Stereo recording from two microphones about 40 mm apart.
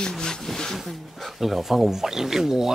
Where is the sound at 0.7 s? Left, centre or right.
Centre.